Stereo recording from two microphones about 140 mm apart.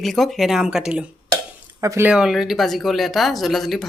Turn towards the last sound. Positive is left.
turn(degrees=0)  # may be behind; listen again after turning